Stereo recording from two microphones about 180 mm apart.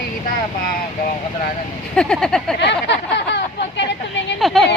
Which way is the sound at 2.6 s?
70° left (ahead or behind).